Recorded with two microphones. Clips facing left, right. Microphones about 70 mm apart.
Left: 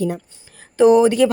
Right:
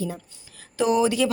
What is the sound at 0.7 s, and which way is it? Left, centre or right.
Speech, left.